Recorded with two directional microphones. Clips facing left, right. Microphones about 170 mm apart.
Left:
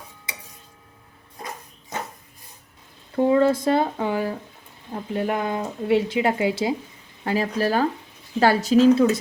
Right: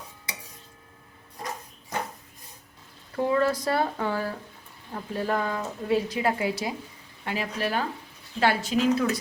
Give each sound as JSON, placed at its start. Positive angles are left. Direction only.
{"t": 3.2, "sound": "speech", "side_deg": 25}
{"t": 7.3, "sound": "speech", "side_deg": 40}